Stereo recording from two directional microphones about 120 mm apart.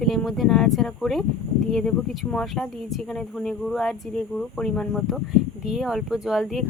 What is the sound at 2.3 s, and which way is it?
Speech, 5° left (ahead or behind).